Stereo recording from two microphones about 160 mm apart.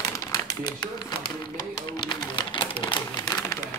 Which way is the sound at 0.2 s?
20° left (ahead or behind).